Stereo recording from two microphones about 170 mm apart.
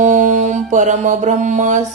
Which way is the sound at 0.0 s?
45° right (ahead or behind).